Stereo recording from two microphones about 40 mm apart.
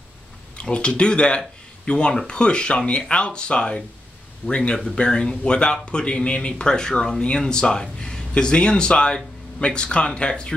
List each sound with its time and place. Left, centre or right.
0.6 s speech: left